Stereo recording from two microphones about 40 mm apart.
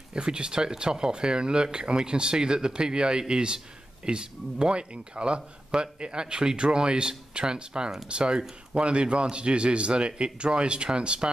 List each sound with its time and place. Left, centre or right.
0.1 s speech: right